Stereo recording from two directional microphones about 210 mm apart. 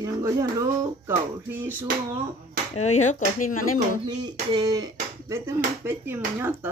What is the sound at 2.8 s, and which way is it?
Speech, 35° left (ahead or behind).